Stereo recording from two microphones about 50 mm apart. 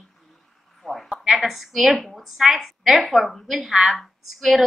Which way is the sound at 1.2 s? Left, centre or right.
Centre.